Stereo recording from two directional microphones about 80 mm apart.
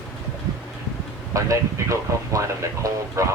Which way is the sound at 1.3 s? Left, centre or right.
Right.